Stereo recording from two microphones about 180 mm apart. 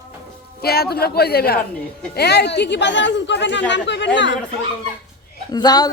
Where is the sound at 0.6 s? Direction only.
60° left (ahead or behind); by 4.4 s 85° left.